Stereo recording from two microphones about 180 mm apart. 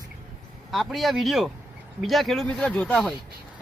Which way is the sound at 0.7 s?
Centre (ahead or behind).